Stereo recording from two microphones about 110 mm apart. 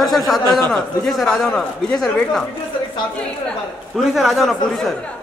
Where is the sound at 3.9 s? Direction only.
Centre (ahead or behind).